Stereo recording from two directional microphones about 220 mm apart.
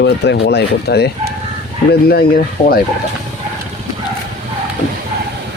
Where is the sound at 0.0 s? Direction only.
50° left (ahead or behind).